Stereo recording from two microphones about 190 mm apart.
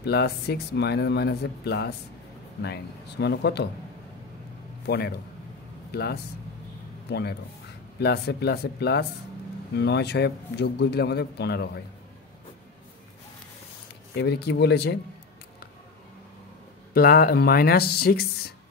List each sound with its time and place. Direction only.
0.0 s speech: 60° left (ahead or behind)
4.8 s speech: 55° left (ahead or behind)
14.1 s speech: 60° left (ahead or behind)
16.9 s speech: 55° left (ahead or behind)